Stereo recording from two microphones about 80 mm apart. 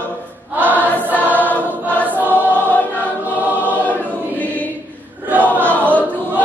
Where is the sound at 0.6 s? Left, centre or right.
Right.